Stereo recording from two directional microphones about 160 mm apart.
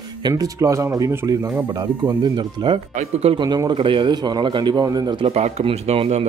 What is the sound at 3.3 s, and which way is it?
Speech, 25° right (ahead or behind).